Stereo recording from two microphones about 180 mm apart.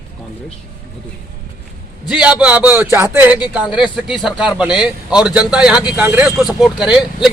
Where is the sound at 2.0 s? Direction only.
5° right (ahead or behind).